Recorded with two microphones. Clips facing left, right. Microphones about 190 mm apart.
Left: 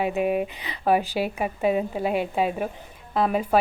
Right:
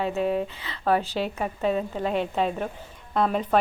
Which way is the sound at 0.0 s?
15° left (ahead or behind).